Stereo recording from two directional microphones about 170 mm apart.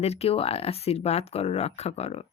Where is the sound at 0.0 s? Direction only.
40° left (ahead or behind).